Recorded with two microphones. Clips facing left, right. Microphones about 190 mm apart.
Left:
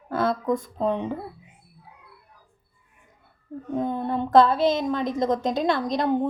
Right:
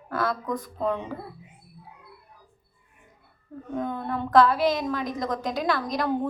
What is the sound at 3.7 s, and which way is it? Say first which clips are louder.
A woman's voice: left 4 dB; 25° left (ahead or behind).